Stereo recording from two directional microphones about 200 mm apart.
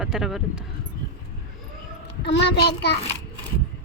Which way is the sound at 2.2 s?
55° left (ahead or behind).